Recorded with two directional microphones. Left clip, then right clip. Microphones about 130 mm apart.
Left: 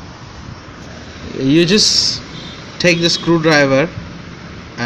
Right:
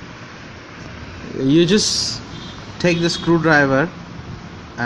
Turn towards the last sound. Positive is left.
turn(degrees=0)  # may be behind; listen again after turning